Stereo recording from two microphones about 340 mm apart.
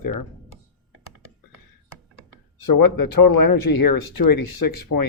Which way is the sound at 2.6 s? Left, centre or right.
Left.